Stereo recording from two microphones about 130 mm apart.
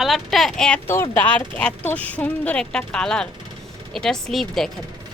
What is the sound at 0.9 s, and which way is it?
Speech, 20° left (ahead or behind).